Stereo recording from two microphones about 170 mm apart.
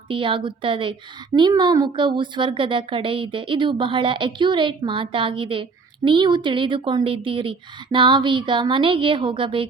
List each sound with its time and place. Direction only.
0.1 s a woman's voice: 30° right (ahead or behind)